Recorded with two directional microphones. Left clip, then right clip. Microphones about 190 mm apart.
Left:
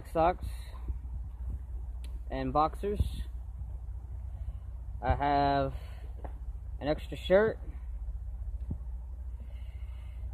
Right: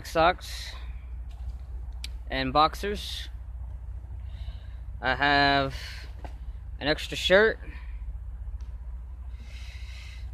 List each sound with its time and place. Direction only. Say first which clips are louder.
0.0 s speech: right 5 dB; 10° right (ahead or behind)
2.0 s speech: right 6 dB; 10° right (ahead or behind)
5.0 s speech: right 5 dB; 15° right (ahead or behind)